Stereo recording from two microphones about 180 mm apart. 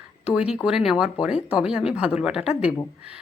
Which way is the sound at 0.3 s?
5° right (ahead or behind).